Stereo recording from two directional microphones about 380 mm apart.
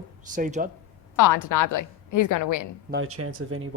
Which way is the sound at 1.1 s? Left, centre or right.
Left.